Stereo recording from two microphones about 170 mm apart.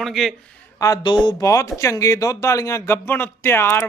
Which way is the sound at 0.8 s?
20° left (ahead or behind).